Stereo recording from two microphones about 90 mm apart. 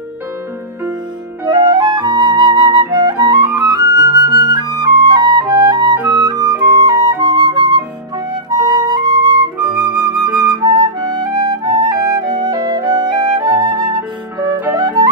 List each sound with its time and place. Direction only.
1.4 s flute: 55° right (ahead or behind)
14.7 s music: 50° right (ahead or behind)